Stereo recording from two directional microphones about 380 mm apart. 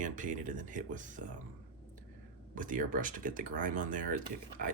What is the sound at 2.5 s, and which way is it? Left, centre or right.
Speech, right.